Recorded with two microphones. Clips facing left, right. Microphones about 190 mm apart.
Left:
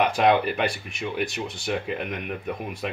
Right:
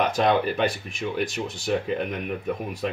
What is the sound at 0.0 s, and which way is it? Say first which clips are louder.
Speech: left 1 dB; 10° left (ahead or behind).